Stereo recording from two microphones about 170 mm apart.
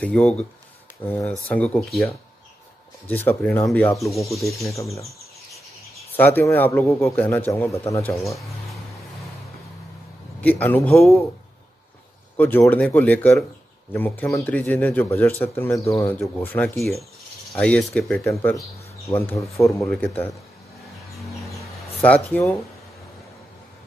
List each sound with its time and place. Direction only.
0.0 s a man's voice: 5° left (ahead or behind)
6.1 s a man's voice: 10° left (ahead or behind)
10.4 s a man's voice: 10° left (ahead or behind)
12.4 s a man's voice: 10° left (ahead or behind)
19.0 s a man's voice: 15° left (ahead or behind)
21.5 s a sound: 15° left (ahead or behind)